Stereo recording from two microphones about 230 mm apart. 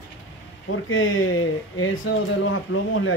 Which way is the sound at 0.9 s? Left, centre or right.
Left.